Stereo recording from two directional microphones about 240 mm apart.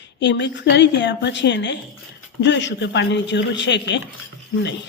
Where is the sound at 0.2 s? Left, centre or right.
Left.